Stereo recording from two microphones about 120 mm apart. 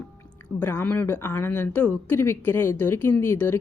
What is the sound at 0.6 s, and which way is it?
A woman's voice, 20° left (ahead or behind).